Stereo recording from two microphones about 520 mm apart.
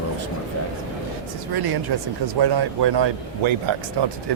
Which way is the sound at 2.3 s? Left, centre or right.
Right.